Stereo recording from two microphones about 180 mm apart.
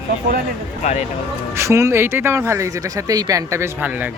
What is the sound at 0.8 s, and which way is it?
Speech, 40° left (ahead or behind).